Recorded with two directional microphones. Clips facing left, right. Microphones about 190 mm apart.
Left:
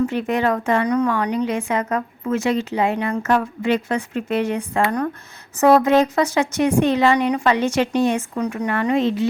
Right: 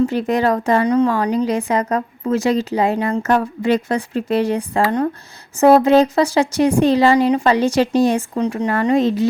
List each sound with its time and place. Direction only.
0.0 s speech: 35° right (ahead or behind)